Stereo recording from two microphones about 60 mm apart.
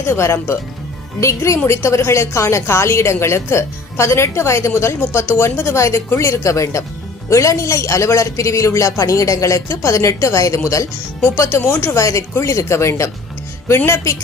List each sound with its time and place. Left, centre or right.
0.0 s a woman's voice: left
5.7 s a woman's voice: left
11.3 s a woman's voice: left
11.9 s a man's voice: left